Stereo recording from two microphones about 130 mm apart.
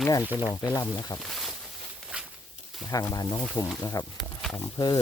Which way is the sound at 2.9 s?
30° left (ahead or behind).